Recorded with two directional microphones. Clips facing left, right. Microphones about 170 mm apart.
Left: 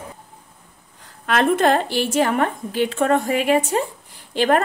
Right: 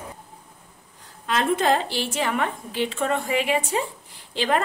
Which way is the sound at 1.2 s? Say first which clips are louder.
Left 5 dB; 60° left (ahead or behind).